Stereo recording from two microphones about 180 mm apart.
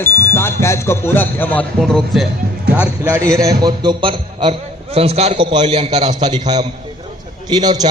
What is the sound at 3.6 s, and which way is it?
Music, 25° right (ahead or behind).